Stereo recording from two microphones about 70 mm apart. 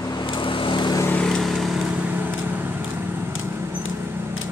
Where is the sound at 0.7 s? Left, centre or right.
Left.